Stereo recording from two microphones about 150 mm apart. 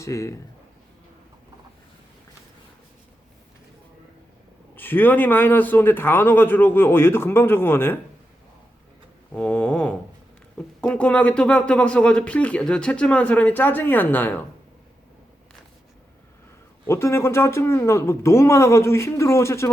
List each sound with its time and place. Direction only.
0.0 s speech: 20° left (ahead or behind)
4.7 s speech: 15° left (ahead or behind)
9.3 s speech: 10° left (ahead or behind)
16.8 s speech: 20° left (ahead or behind)